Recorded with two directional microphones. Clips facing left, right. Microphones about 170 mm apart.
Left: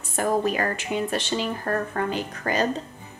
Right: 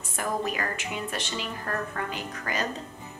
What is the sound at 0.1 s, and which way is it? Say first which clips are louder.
A woman's voice: left 7 dB; 35° left (ahead or behind).